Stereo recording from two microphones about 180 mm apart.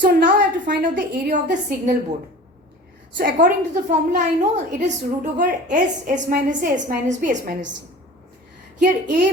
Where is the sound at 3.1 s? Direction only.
45° right (ahead or behind).